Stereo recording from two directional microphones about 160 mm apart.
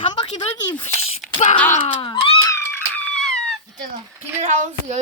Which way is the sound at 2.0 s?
35° left (ahead or behind).